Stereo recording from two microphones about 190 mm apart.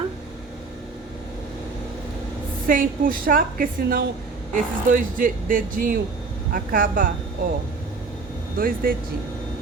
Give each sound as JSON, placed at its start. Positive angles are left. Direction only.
{"t": 2.6, "sound": "speech", "side_deg": -45}
{"t": 8.5, "sound": "speech", "side_deg": -50}